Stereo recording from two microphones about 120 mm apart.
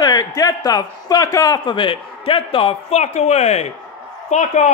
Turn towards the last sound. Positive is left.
turn(degrees=80)